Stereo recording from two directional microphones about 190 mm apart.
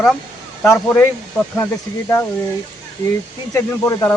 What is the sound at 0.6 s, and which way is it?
Speech, 15° left (ahead or behind).